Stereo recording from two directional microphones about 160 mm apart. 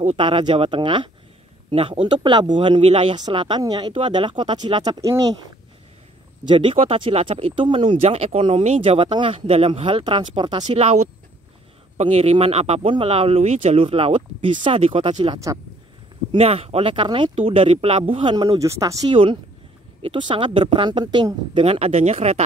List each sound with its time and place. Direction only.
0.0 s speech: 35° right (ahead or behind)
6.4 s speech: 30° right (ahead or behind)